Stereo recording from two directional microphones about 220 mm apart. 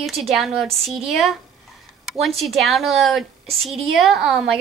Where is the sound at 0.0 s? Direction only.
Centre (ahead or behind).